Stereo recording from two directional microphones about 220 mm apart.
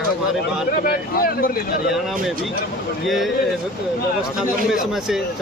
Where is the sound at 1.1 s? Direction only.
40° left (ahead or behind).